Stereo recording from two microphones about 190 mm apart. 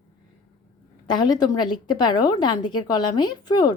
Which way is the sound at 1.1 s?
20° left (ahead or behind).